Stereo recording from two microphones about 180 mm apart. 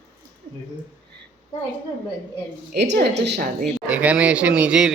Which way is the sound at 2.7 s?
70° right (ahead or behind).